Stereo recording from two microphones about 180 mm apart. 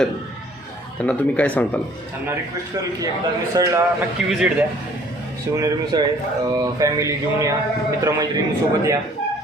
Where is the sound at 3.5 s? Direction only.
20° right (ahead or behind).